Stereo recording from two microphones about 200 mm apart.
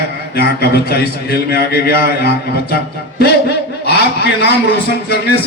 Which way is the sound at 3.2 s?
55° left (ahead or behind).